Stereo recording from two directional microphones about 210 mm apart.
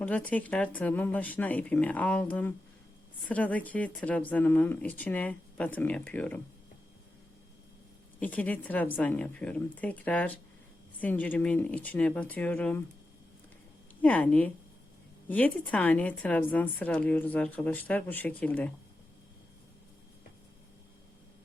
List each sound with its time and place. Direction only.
0.0 s a woman's voice: 5° left (ahead or behind)
8.2 s a woman's voice: 5° left (ahead or behind)
14.0 s a woman's voice: 5° left (ahead or behind)